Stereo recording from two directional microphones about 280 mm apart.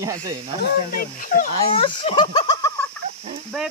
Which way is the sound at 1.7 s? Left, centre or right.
Centre.